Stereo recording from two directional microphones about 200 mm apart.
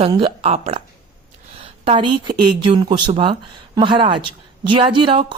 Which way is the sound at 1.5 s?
30° right (ahead or behind).